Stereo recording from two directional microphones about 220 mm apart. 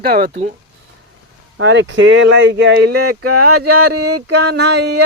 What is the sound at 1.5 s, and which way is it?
Speech, 60° right (ahead or behind).